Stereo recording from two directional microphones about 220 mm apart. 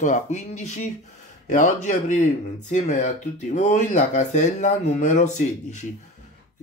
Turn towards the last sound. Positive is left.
turn(degrees=35)  # may be behind; listen again after turning